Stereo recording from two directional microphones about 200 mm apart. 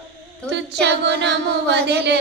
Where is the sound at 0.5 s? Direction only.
55° right (ahead or behind).